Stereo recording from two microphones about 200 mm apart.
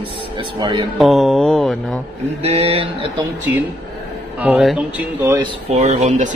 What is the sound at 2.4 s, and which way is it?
Speech, 30° right (ahead or behind).